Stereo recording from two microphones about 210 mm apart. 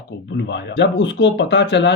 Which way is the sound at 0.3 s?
55° left (ahead or behind).